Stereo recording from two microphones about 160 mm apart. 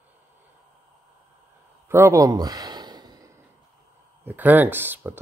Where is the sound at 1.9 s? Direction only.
20° right (ahead or behind).